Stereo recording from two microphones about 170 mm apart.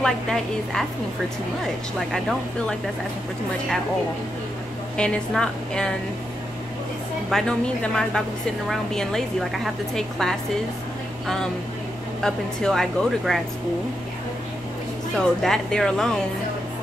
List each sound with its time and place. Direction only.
0.0 s a woman's voice: 5° left (ahead or behind)
4.9 s a woman's voice: 5° left (ahead or behind)
7.2 s a woman's voice: 5° left (ahead or behind)
12.2 s a woman's voice: 5° left (ahead or behind)
15.1 s a woman's voice: centre (ahead or behind)